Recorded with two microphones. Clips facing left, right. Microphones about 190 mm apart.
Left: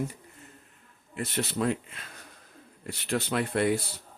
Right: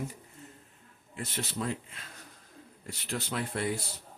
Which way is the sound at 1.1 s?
65° left (ahead or behind).